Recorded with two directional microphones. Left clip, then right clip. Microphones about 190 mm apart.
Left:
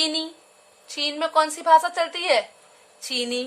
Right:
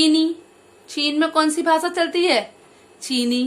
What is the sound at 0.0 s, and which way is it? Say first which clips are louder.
A woman's voice: right 8 dB; 15° left (ahead or behind).